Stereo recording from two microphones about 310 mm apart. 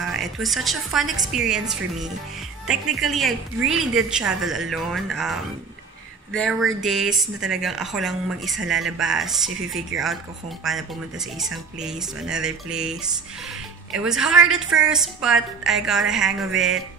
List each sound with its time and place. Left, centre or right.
0.1 s a woman's voice: centre
6.8 s speech: centre